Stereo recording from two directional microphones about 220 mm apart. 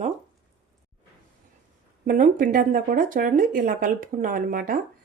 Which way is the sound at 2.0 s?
35° right (ahead or behind).